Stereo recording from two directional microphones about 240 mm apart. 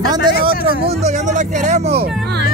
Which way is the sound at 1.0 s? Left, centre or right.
Right.